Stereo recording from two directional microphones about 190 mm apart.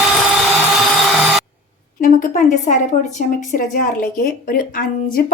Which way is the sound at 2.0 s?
45° left (ahead or behind).